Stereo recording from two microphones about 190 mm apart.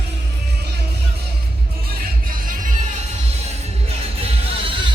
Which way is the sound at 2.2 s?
50° right (ahead or behind).